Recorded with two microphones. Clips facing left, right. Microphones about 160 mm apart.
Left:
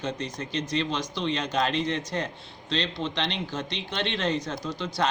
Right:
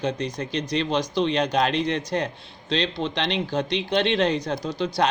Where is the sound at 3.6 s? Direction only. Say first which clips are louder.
Right 8 dB; 70° right (ahead or behind).